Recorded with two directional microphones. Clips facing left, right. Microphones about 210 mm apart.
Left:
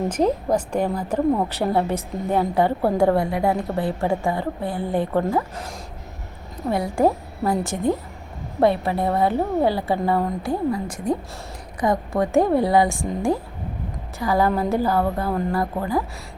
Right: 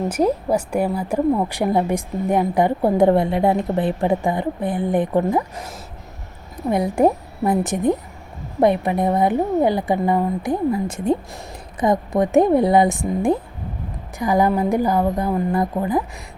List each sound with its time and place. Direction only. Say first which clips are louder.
0.1 s a woman's voice: right 2 dB; 10° right (ahead or behind)
6.7 s a woman's voice: right 3 dB; 20° right (ahead or behind)